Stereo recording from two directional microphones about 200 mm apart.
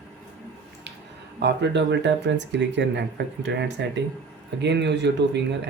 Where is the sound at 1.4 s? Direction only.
60° right (ahead or behind).